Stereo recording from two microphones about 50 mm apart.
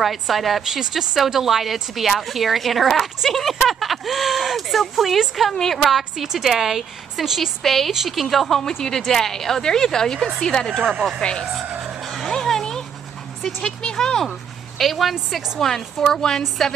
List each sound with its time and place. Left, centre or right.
0.0 s a woman's voice: centre
5.9 s a woman's voice: centre
11.8 s music: centre
12.3 s a sound: centre
13.6 s a woman's voice: centre